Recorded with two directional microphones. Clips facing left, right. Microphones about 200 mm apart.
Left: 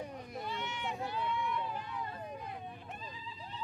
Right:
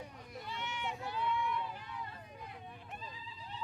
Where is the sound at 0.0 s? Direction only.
20° left (ahead or behind).